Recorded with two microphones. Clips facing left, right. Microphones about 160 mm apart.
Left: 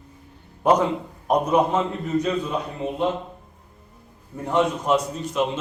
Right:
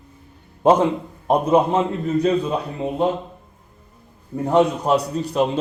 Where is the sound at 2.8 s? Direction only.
35° right (ahead or behind).